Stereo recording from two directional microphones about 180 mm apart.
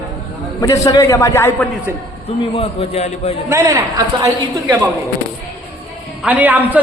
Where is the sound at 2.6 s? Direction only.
35° left (ahead or behind).